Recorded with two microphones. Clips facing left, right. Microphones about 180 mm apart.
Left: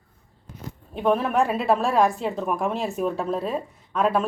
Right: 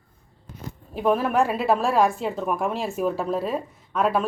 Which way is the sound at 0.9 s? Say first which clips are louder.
Even; centre (ahead or behind).